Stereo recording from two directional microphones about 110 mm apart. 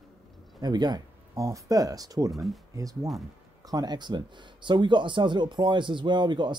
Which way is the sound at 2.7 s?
30° right (ahead or behind).